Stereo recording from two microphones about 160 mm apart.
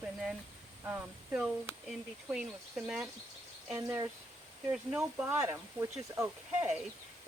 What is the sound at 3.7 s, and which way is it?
Speech, 20° right (ahead or behind).